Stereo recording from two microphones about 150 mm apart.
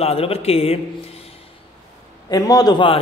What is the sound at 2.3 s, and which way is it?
Speech, 25° left (ahead or behind).